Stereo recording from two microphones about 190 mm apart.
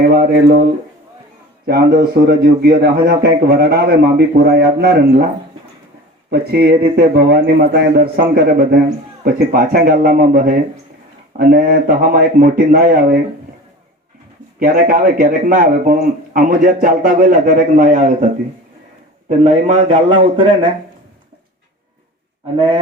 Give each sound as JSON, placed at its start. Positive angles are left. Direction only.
{"t": 1.6, "sound": "a man's voice", "side_deg": -60}
{"t": 6.3, "sound": "a man's voice", "side_deg": -55}
{"t": 14.6, "sound": "a man's voice", "side_deg": -50}
{"t": 19.3, "sound": "a man's voice", "side_deg": -35}
{"t": 22.5, "sound": "speech", "side_deg": -25}